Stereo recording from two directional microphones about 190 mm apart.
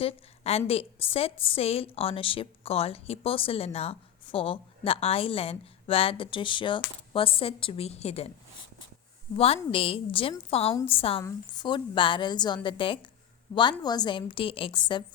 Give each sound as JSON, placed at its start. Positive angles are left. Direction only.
{"t": 0.0, "sound": "a woman's voice", "side_deg": 30}
{"t": 9.3, "sound": "a woman's voice", "side_deg": 30}
{"t": 11.2, "sound": "a woman's voice", "side_deg": 20}